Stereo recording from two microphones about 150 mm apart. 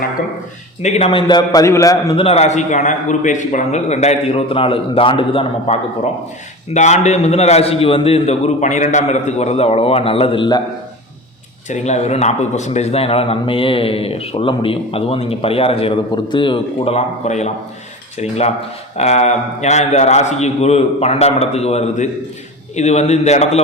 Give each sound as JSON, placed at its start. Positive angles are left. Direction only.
{"t": 0.8, "sound": "a man's voice", "side_deg": 45}
{"t": 2.1, "sound": "a man's voice", "side_deg": 40}
{"t": 11.7, "sound": "a man's voice", "side_deg": 50}